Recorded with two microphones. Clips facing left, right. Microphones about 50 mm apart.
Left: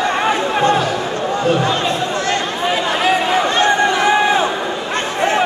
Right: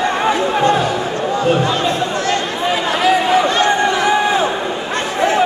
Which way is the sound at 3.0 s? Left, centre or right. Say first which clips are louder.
Right 3 dB; left.